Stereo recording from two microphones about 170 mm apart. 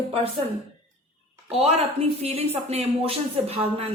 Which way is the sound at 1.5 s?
35° right (ahead or behind).